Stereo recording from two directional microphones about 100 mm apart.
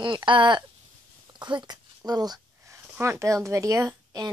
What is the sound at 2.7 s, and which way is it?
Speech, 25° right (ahead or behind).